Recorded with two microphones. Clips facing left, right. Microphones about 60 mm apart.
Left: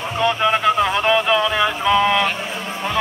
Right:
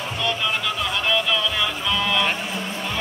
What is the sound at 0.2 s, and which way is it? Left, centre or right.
Music, left.